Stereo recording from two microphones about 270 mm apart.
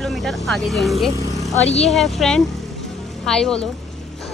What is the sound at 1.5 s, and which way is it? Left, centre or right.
Speech, left.